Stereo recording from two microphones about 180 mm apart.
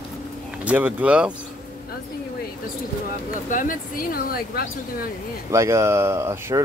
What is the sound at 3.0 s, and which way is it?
Speech, 50° left (ahead or behind).